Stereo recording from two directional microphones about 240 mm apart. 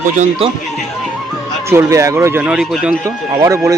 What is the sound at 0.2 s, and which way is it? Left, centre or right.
Speech, right.